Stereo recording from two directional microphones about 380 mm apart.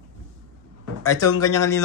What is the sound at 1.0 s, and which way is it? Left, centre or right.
Speech, centre.